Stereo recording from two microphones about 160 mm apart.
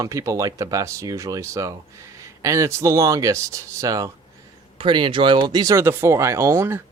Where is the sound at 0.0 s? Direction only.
20° right (ahead or behind).